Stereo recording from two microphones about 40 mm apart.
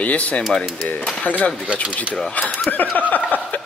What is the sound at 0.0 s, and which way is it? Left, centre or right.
Speech, left.